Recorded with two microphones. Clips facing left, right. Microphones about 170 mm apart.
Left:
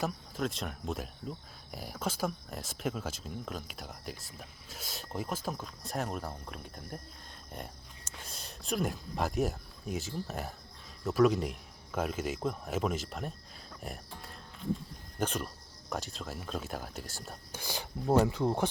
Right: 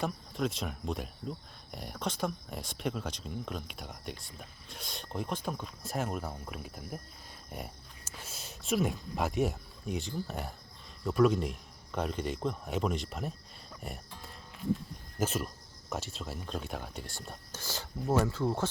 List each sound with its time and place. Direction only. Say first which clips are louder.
0.0 s speech: right 1 dB; centre (ahead or behind)
17.5 s speech: left 2 dB; 15° left (ahead or behind)